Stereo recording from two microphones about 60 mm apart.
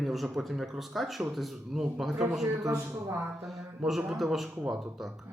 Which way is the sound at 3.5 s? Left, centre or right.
Centre.